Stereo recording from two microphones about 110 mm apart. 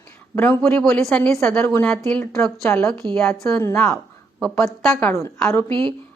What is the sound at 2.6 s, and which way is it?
Speech, 25° left (ahead or behind).